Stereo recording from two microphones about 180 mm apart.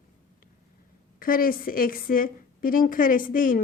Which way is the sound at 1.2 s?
50° left (ahead or behind).